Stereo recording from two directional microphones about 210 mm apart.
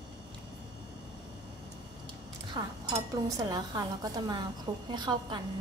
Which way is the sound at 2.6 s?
25° right (ahead or behind).